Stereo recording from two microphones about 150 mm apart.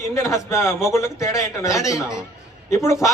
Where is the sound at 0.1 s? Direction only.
20° left (ahead or behind).